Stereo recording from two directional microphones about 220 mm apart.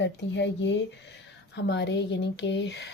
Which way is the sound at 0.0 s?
50° left (ahead or behind).